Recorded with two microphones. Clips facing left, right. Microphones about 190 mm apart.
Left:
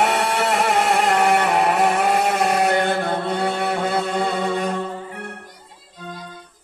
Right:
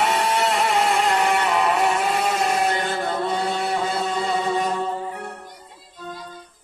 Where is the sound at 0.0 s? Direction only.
65° left (ahead or behind).